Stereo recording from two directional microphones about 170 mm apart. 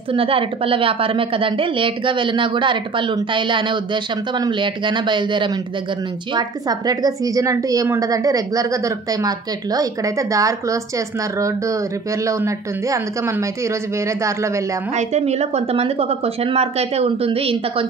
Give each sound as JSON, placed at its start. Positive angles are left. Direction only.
{"t": 0.1, "sound": "a woman's voice", "side_deg": -30}
{"t": 12.3, "sound": "speech", "side_deg": -20}
{"t": 15.0, "sound": "speech", "side_deg": -40}